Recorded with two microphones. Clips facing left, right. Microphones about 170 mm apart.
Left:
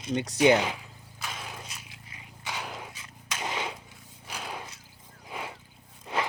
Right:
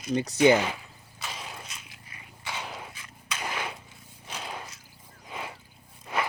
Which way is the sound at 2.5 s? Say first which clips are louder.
Even; centre (ahead or behind).